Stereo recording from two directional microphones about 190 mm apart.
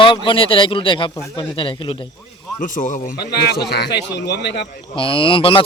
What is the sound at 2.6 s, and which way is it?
Speech, 45° left (ahead or behind).